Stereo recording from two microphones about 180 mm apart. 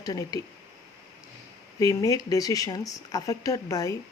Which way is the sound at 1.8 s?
20° left (ahead or behind).